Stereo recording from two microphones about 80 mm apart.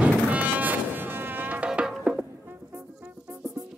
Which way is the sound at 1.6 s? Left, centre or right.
Centre.